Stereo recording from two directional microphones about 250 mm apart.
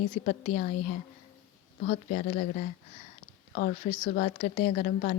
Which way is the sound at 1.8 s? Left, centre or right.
Left.